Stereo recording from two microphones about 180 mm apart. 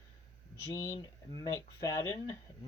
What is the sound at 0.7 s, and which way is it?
Speech, 15° left (ahead or behind).